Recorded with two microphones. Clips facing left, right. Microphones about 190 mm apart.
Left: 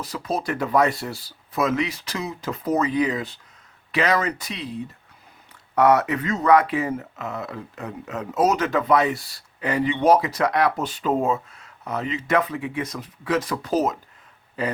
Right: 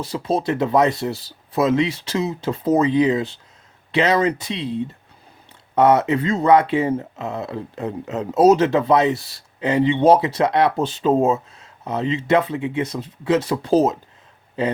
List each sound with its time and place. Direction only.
0.0 s speech: 25° right (ahead or behind)